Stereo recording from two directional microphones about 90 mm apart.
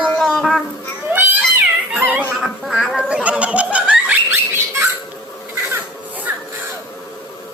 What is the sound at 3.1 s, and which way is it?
Laughter, 15° right (ahead or behind).